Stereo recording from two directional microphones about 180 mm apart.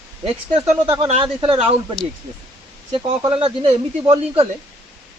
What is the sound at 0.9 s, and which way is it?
Speech, 30° right (ahead or behind).